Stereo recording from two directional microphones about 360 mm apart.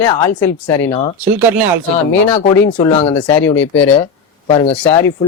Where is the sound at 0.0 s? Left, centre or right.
Centre.